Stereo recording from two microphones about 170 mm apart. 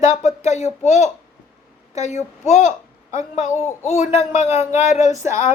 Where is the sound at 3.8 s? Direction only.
40° left (ahead or behind).